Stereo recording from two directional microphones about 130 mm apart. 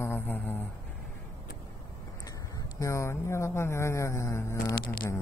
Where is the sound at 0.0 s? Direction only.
15° left (ahead or behind).